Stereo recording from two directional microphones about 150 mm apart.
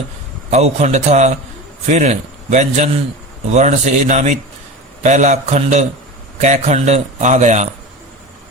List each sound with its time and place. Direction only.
0.5 s a man's voice: 45° right (ahead or behind)